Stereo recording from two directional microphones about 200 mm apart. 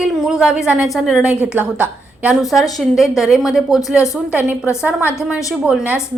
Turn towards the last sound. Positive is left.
turn(degrees=-5)  # may be behind; listen again after turning